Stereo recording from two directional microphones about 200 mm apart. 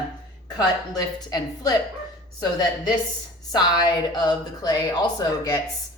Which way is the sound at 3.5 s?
20° left (ahead or behind).